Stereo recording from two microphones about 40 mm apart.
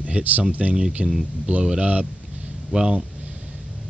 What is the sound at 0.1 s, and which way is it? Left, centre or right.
Speech, right.